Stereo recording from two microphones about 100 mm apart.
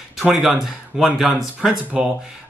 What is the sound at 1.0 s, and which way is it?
Speech, 5° right (ahead or behind).